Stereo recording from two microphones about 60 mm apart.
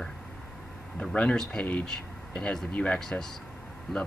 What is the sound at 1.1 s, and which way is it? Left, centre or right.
Speech, centre.